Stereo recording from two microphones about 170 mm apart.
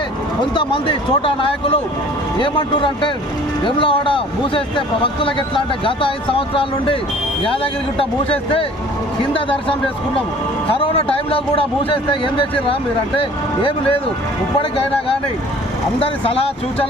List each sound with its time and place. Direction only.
0.5 s speech: 30° left (ahead or behind)
16.0 s speech: 35° left (ahead or behind)